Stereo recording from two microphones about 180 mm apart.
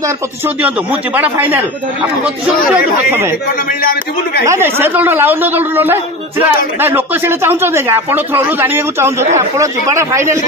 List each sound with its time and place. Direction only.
0.6 s speech: 10° right (ahead or behind)
2.7 s speech: 10° right (ahead or behind)
4.5 s speech: 10° right (ahead or behind)